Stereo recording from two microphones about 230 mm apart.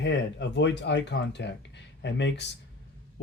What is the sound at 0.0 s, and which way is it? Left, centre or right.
Speech, left.